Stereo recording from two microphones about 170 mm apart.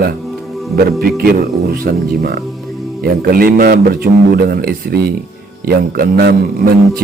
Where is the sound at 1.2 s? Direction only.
65° right (ahead or behind).